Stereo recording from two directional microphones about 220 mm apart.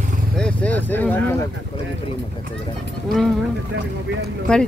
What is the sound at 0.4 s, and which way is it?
Speech, 5° left (ahead or behind).